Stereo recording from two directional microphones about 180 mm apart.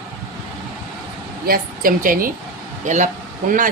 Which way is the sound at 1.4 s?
55° right (ahead or behind).